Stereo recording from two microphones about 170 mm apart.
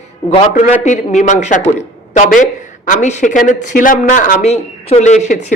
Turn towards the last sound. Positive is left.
turn(degrees=45)  # may be behind; listen again after turning